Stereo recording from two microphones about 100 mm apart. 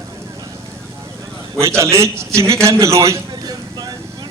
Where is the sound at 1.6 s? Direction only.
25° right (ahead or behind).